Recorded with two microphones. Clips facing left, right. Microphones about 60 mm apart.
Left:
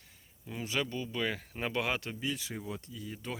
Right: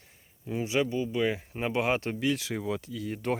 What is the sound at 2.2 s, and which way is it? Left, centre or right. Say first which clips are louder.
Speech: right 8 dB; right.